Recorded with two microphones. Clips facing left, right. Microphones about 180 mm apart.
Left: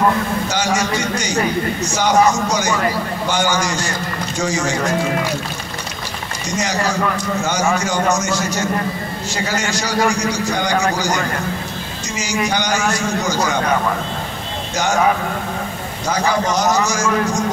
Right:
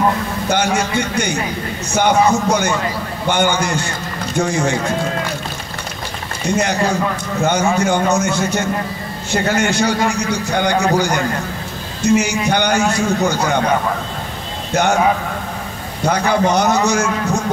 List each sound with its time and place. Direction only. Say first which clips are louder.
0.5 s a man's voice: right 6 dB; 55° right (ahead or behind)
6.4 s a man's voice: right 4 dB; 55° right (ahead or behind)
14.7 s a man's voice: right 4 dB; 60° right (ahead or behind)
16.1 s a man's voice: right 3 dB; 60° right (ahead or behind)